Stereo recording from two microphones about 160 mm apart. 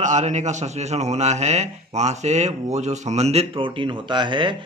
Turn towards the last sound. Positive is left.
turn(degrees=-30)  # may be behind; listen again after turning